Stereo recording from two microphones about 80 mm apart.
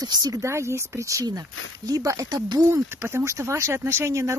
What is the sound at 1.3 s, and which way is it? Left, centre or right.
Speech, right.